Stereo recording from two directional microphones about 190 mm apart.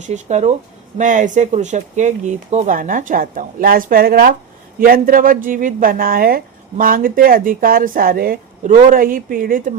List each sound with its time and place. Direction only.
0.0 s speech: 40° right (ahead or behind)